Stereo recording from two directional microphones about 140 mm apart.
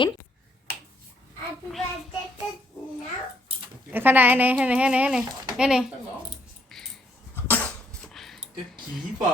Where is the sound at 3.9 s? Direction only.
15° right (ahead or behind).